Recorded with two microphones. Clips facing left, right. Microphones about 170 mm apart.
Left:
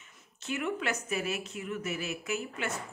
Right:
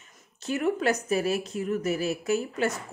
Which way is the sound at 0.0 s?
40° right (ahead or behind).